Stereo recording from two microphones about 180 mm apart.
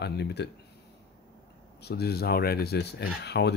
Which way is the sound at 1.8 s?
60° left (ahead or behind).